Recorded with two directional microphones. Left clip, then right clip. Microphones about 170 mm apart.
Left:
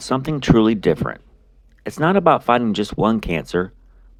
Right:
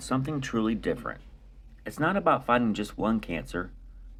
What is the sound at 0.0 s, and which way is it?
Speech, 50° left (ahead or behind).